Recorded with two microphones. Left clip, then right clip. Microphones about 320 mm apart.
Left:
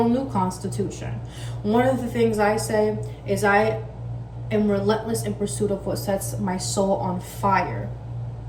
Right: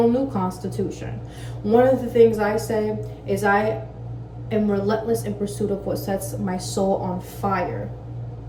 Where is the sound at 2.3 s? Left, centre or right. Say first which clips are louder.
Left 1 dB; centre.